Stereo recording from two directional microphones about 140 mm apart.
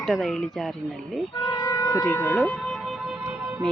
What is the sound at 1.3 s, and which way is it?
Music, 30° left (ahead or behind).